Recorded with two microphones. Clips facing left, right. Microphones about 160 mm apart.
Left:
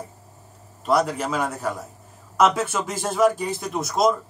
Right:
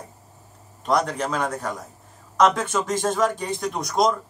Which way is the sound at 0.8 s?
5° left (ahead or behind).